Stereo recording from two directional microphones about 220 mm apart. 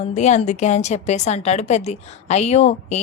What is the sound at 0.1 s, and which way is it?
A woman's voice, 30° left (ahead or behind).